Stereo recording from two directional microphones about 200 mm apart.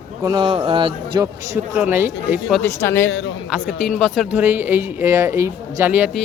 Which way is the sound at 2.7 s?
15° left (ahead or behind).